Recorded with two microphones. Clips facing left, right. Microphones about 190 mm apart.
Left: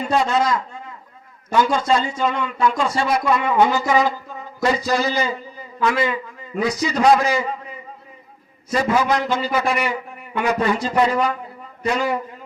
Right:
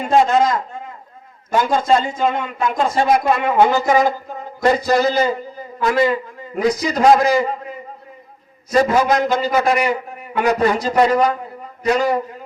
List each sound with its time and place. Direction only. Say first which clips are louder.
0.0 s a man's voice: right 4 dB; 50° right (ahead or behind)
8.7 s a man's voice: right 4 dB; 40° right (ahead or behind)